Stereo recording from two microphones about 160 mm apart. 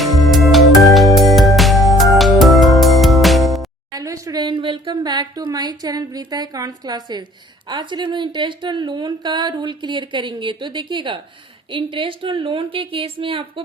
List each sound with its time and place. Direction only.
0.0 s music: centre (ahead or behind)
3.9 s a woman's voice: 20° right (ahead or behind)